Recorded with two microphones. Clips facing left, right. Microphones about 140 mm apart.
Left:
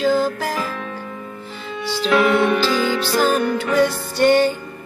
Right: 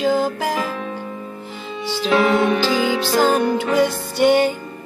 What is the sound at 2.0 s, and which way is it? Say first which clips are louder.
Music: even; 30° right (ahead or behind).